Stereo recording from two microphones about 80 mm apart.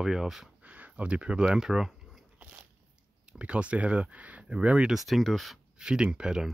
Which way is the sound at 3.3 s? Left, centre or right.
Centre.